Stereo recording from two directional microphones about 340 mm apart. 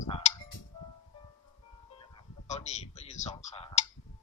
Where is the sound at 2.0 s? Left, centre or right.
Centre.